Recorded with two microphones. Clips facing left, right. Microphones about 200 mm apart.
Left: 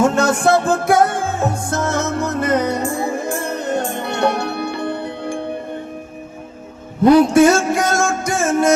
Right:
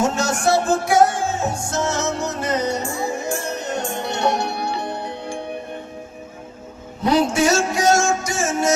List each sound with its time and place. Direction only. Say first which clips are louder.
0.0 s music: left 5 dB; 55° left (ahead or behind)
7.0 s music: left 8 dB; 55° left (ahead or behind)